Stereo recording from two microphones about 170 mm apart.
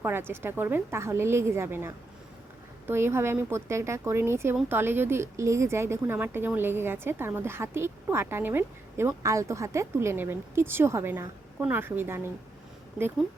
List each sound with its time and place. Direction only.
0.0 s speech: 15° right (ahead or behind)